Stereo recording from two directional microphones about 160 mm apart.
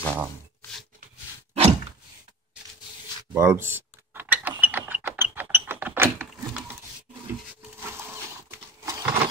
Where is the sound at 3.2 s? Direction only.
20° right (ahead or behind).